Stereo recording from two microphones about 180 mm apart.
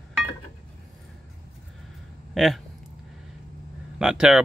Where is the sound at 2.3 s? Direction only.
Centre (ahead or behind).